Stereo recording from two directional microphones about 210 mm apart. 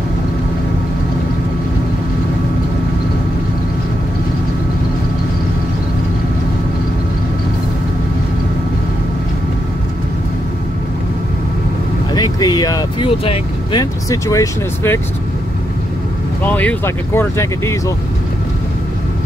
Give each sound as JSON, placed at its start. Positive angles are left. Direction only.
{"t": 12.1, "sound": "speech", "side_deg": 20}
{"t": 16.4, "sound": "speech", "side_deg": 10}